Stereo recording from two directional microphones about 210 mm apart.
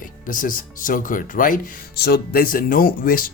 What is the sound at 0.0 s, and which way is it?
Speech, 40° left (ahead or behind).